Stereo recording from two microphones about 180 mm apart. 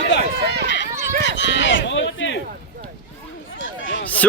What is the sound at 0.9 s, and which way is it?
Run, 50° right (ahead or behind).